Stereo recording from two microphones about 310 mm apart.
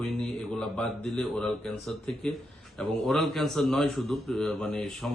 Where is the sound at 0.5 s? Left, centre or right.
Centre.